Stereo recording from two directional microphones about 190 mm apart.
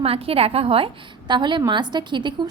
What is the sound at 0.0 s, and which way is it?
A woman's voice, 30° right (ahead or behind).